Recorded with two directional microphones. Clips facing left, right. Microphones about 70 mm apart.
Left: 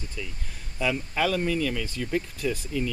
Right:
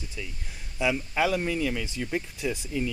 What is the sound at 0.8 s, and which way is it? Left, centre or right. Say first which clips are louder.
Speech: right 1 dB; centre.